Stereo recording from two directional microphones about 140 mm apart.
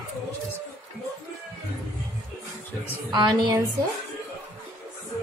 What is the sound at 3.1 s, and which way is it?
Speech, 35° right (ahead or behind).